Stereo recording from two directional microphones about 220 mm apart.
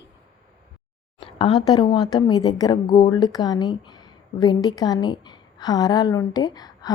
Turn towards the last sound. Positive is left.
turn(degrees=20)  # may be behind; listen again after turning